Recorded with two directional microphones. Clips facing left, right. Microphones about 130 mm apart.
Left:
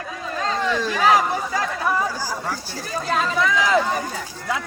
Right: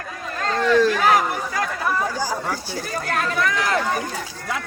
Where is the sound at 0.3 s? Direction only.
5° left (ahead or behind).